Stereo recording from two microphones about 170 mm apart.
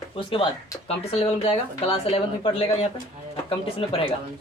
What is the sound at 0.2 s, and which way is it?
Speech, 30° left (ahead or behind).